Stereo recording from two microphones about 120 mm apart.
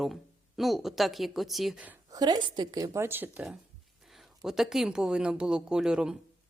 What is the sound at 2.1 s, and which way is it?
Speech, 35° right (ahead or behind).